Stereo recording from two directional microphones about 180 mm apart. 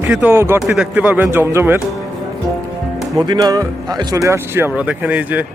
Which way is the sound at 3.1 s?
25° right (ahead or behind).